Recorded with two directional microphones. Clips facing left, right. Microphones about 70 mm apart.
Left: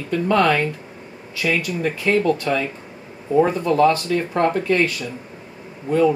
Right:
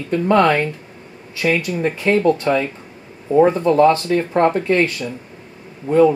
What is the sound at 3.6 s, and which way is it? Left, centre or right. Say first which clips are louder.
Speech: right 3 dB; right.